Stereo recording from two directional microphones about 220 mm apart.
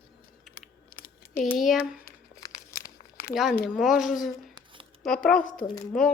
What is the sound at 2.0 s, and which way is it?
Crumpling, 15° left (ahead or behind).